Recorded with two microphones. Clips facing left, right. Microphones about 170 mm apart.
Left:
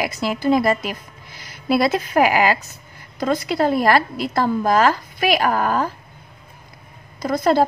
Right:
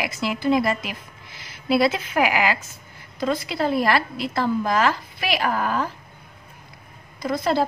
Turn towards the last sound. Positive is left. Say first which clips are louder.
# left 5 dB
turn(degrees=45)  # may be behind; listen again after turning